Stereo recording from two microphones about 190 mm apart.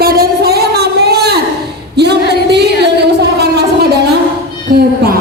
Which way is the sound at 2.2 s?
60° left (ahead or behind).